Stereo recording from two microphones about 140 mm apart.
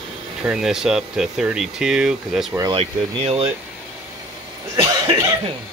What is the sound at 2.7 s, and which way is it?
Speech, 45° right (ahead or behind).